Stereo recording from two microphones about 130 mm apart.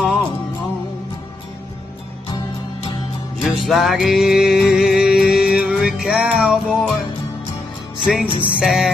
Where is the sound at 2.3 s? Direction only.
35° left (ahead or behind).